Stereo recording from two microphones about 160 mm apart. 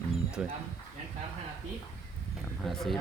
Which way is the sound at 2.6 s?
Centre (ahead or behind).